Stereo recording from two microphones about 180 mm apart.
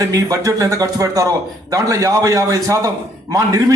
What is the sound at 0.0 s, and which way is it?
A man's voice, 20° right (ahead or behind).